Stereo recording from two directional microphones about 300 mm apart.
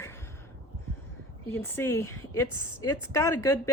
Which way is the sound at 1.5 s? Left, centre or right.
Centre.